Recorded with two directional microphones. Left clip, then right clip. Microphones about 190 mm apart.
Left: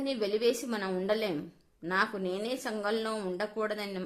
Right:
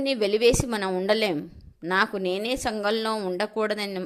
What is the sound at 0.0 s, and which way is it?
A woman's voice, 30° right (ahead or behind).